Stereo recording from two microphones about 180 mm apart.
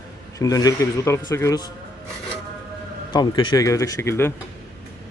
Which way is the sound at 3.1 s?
25° left (ahead or behind).